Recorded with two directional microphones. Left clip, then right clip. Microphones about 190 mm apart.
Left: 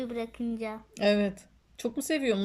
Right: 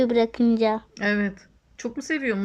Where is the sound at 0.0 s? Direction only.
50° right (ahead or behind).